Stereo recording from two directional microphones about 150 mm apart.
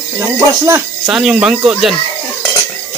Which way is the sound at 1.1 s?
5° right (ahead or behind).